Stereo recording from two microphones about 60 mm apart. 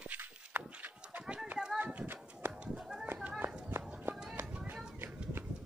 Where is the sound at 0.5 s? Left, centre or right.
Right.